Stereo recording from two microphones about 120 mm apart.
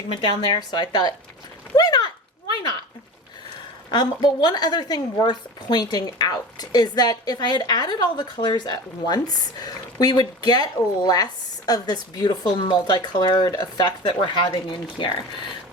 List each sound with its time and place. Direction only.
0.1 s a woman's voice: 35° left (ahead or behind)
1.7 s a sound: 35° left (ahead or behind)
3.9 s a woman's voice: 35° left (ahead or behind)